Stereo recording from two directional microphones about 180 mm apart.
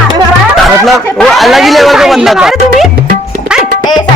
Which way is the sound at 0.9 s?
Centre (ahead or behind).